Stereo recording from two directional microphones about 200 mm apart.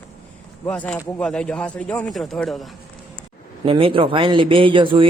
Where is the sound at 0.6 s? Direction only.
5° left (ahead or behind).